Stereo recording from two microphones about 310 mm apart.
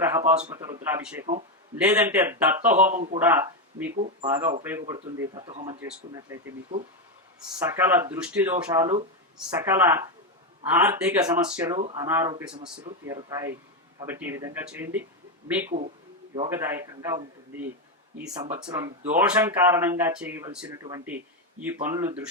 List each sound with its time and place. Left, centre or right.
0.0 s a man's voice: centre
3.9 s speech: right
4.3 s a man's voice: centre
15.7 s a man's voice: right; by 22.3 s centre